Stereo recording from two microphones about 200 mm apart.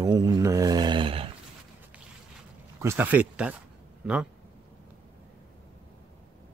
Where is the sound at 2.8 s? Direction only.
10° right (ahead or behind).